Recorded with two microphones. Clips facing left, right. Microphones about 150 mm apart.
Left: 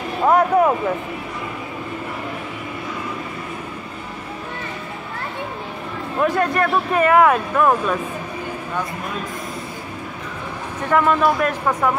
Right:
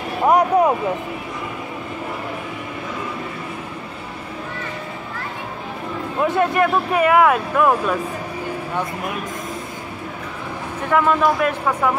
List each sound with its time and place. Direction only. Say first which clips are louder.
0.3 s speech: even; 15° right (ahead or behind)
6.2 s speech: right 1 dB; 20° right (ahead or behind)
10.9 s speech: even; centre (ahead or behind)